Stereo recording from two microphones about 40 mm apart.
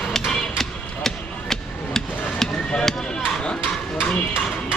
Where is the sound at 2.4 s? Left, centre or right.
Centre.